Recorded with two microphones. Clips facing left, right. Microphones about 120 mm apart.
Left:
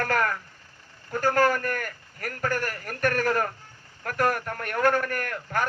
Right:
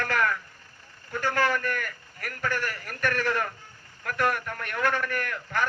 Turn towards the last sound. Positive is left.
turn(degrees=45)  # may be behind; listen again after turning